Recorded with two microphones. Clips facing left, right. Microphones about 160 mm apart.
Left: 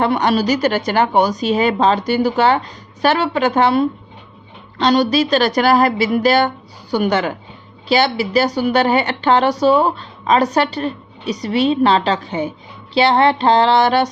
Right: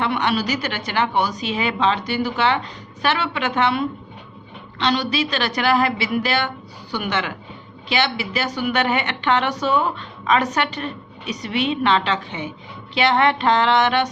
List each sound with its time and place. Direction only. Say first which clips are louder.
0.0 s speech: left 6 dB; 40° left (ahead or behind)